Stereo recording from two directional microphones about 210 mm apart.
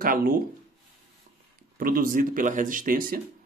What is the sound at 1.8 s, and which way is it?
Speech, 45° right (ahead or behind).